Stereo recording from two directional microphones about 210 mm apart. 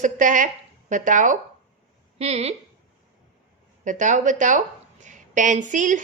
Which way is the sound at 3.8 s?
35° right (ahead or behind).